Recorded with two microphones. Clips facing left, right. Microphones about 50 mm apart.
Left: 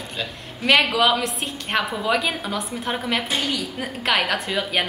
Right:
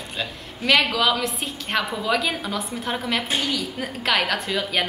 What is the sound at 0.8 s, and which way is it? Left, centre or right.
Speech, centre.